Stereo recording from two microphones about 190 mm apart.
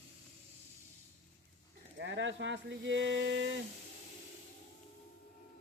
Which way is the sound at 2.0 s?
75° right (ahead or behind).